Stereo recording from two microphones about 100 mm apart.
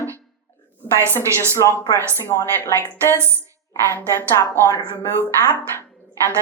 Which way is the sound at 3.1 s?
25° right (ahead or behind).